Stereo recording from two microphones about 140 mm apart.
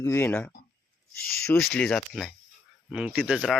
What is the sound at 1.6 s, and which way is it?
Speech, 5° left (ahead or behind).